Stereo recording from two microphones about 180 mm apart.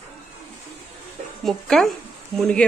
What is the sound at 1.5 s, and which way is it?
Speech, centre (ahead or behind).